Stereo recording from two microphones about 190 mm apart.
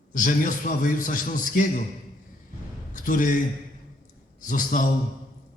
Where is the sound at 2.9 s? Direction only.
45° left (ahead or behind).